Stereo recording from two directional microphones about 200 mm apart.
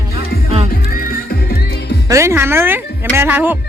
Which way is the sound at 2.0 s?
15° right (ahead or behind).